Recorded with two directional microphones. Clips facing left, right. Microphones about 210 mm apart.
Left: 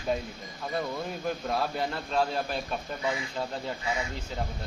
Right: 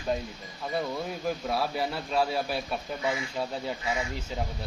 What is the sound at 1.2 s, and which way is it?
A man's voice, 5° right (ahead or behind).